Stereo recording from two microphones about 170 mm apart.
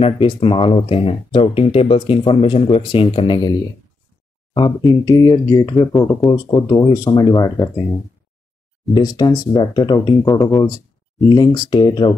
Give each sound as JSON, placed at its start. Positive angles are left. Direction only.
{"t": 0.0, "sound": "speech", "side_deg": 30}
{"t": 4.6, "sound": "speech", "side_deg": 25}
{"t": 8.9, "sound": "speech", "side_deg": 25}